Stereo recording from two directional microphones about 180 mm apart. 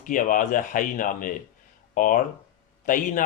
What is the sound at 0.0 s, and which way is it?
Speech, 50° left (ahead or behind).